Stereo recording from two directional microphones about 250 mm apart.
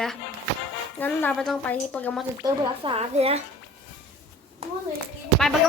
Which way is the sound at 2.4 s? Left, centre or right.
Right.